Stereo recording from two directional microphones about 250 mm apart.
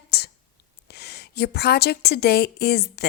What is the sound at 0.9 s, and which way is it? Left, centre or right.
A woman's voice, left.